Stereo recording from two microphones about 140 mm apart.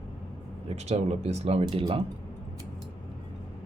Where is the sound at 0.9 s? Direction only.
50° right (ahead or behind).